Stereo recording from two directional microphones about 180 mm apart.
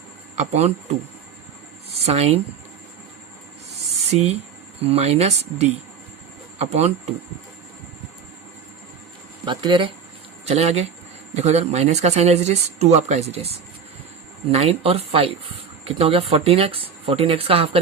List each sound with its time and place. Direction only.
0.3 s speech: 40° right (ahead or behind)
4.1 s speech: 35° right (ahead or behind)
9.4 s speech: 25° right (ahead or behind)
10.4 s speech: 35° right (ahead or behind)